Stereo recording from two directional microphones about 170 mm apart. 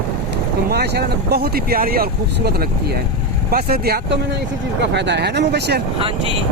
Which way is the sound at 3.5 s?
60° right (ahead or behind).